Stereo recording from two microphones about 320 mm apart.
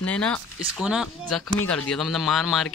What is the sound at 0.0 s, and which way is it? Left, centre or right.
Speech, centre.